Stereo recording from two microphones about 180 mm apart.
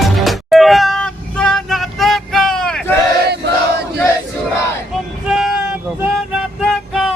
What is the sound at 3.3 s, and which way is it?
Choir, 65° right (ahead or behind).